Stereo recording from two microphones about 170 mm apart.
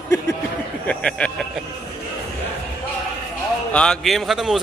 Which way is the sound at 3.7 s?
5° left (ahead or behind).